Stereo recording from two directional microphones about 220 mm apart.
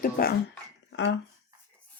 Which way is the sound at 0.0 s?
45° left (ahead or behind).